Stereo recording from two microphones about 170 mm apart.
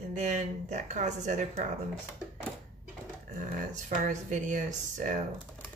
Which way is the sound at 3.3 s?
50° right (ahead or behind).